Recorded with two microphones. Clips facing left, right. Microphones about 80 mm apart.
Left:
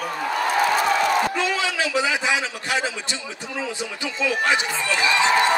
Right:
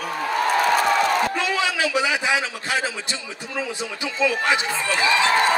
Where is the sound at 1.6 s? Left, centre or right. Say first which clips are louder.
Right 1 dB; centre.